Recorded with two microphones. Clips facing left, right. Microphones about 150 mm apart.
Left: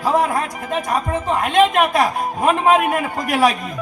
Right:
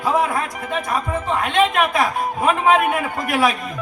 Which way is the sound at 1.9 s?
40° left (ahead or behind).